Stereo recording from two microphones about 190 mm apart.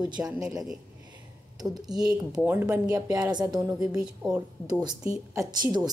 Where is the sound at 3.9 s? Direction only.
5° right (ahead or behind).